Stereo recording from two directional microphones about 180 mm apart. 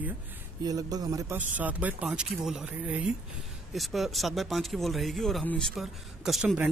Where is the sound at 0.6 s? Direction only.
20° right (ahead or behind).